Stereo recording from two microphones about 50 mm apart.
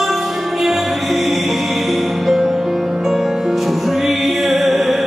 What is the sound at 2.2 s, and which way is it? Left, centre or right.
Music, centre.